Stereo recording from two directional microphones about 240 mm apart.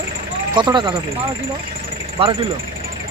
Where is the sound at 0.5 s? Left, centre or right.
Centre.